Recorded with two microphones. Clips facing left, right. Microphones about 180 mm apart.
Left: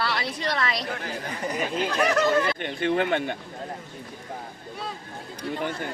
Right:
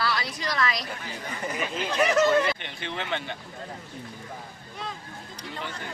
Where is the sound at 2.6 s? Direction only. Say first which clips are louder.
Left 11 dB; 50° left (ahead or behind).